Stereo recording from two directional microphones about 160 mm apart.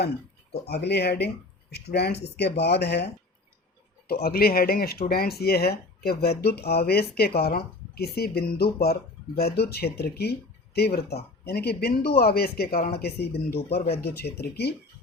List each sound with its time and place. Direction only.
0.6 s speech: 90° left
4.0 s speech: 75° left (ahead or behind)
13.0 s speech: 90° left